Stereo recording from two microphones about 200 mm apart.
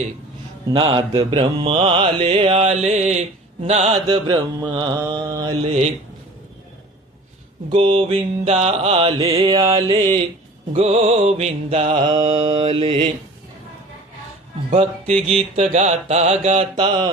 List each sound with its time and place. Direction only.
0.7 s mantra: 25° right (ahead or behind)
7.7 s mantra: 25° right (ahead or behind)
10.7 s music: 30° right (ahead or behind)
12.0 s mantra: 25° right (ahead or behind)
14.7 s music: 35° right (ahead or behind)